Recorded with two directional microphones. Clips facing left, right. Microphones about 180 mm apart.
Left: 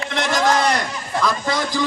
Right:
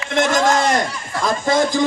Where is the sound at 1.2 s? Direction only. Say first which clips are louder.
Right 5 dB; 50° right (ahead or behind).